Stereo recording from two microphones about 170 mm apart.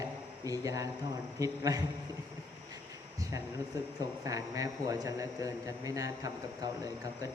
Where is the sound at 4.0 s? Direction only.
20° right (ahead or behind).